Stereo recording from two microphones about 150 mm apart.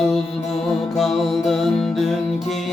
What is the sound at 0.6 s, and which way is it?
Music, centre (ahead or behind).